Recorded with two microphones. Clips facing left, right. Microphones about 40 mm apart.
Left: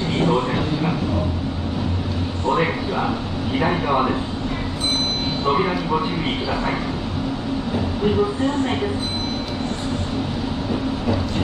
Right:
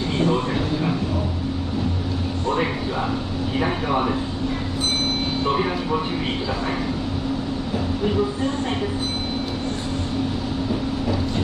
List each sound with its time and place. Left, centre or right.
0.2 s a sound: centre
3.5 s speech: centre
5.4 s speech: centre